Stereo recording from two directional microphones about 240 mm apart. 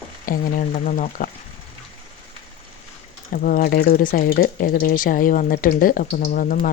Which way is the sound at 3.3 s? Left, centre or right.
Left.